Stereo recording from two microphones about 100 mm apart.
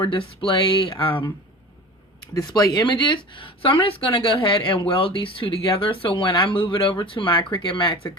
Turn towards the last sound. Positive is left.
turn(degrees=50)  # may be behind; listen again after turning